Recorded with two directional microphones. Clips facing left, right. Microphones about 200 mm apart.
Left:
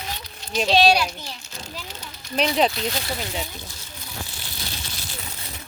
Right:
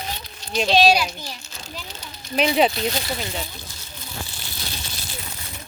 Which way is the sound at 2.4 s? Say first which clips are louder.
Right 2 dB; 5° right (ahead or behind).